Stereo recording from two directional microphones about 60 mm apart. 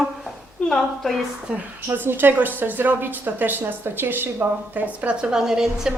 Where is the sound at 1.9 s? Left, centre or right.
Right.